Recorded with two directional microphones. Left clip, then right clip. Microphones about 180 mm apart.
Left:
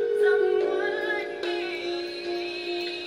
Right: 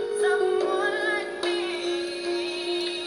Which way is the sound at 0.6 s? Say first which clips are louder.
Right 1 dB; 45° right (ahead or behind).